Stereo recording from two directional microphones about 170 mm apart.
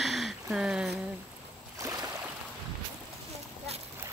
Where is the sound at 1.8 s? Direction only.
20° right (ahead or behind).